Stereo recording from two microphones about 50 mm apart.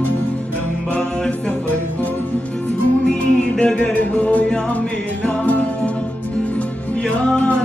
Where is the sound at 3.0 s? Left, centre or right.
Centre; by 5.9 s left.